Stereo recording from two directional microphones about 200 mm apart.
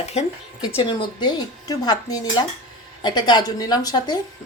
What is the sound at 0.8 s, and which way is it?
A woman's voice, 25° left (ahead or behind).